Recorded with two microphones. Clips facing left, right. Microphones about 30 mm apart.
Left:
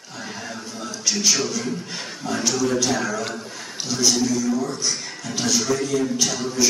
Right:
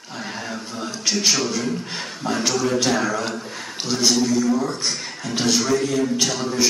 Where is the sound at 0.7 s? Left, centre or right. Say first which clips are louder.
Right 1 dB; centre.